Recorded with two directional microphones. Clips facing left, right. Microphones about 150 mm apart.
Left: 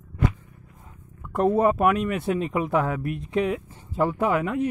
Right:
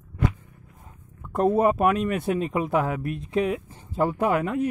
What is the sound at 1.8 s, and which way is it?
Speech, 30° right (ahead or behind).